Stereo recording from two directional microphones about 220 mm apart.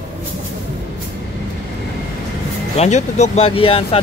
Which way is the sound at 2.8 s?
30° left (ahead or behind).